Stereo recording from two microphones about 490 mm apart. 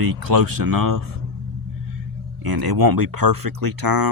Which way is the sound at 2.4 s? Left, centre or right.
Right.